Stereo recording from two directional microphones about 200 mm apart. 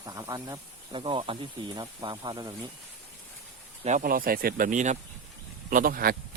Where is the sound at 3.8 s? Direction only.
40° right (ahead or behind).